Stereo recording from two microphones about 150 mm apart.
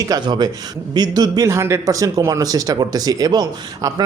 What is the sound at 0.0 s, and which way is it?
Speech, 25° right (ahead or behind).